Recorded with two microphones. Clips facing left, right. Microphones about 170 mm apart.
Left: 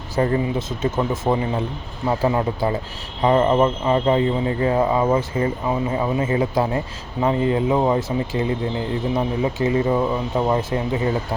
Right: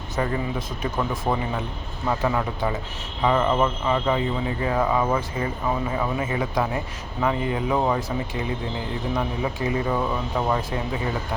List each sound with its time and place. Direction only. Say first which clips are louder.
0.2 s speech: left 6 dB; 35° left (ahead or behind)